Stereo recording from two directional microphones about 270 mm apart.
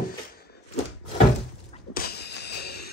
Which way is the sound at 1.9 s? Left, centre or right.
Left.